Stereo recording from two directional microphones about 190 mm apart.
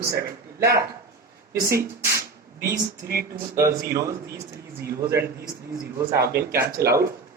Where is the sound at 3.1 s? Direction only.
55° right (ahead or behind).